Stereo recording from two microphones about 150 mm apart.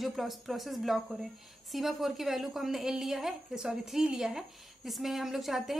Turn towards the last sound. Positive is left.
turn(degrees=0)  # may be behind; listen again after turning